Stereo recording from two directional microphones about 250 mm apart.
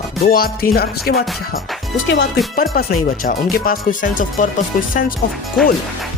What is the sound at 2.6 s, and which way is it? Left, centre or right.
Speech, left.